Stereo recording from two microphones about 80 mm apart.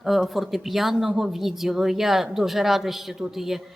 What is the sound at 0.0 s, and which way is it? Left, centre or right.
Speech, centre.